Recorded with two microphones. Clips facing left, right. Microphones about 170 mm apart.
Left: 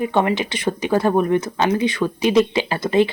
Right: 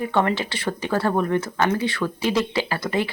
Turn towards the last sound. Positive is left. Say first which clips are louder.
# left 6 dB
turn(degrees=25)  # may be behind; listen again after turning